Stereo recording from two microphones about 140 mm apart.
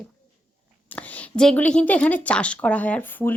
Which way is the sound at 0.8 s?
10° left (ahead or behind).